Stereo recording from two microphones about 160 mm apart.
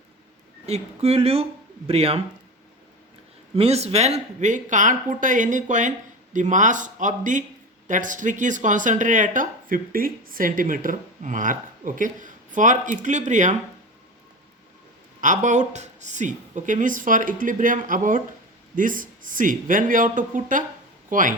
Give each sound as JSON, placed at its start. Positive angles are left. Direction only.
{"t": 0.6, "sound": "speech", "side_deg": -40}
{"t": 3.5, "sound": "speech", "side_deg": -40}
{"t": 15.2, "sound": "speech", "side_deg": -50}